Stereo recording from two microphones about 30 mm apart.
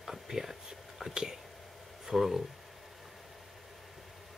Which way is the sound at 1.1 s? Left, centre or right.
Right.